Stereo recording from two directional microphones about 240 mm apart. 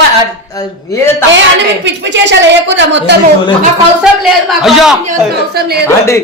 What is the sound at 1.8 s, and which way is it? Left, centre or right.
A woman's voice, right.